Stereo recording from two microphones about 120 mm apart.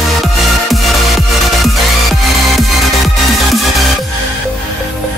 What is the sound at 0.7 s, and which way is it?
Music, centre (ahead or behind).